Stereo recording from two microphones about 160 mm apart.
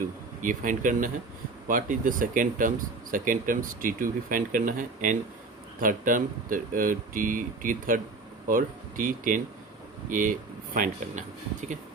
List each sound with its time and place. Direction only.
0.4 s a man's voice: 55° right (ahead or behind)